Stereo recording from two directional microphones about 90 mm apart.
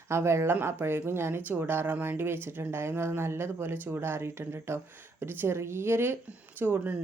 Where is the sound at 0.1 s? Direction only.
30° right (ahead or behind).